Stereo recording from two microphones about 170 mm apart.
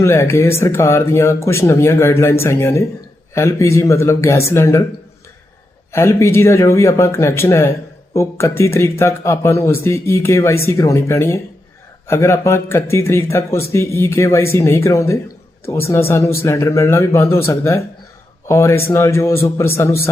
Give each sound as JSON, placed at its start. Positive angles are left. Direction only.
{"t": 0.0, "sound": "speech", "side_deg": 15}
{"t": 5.9, "sound": "speech", "side_deg": 15}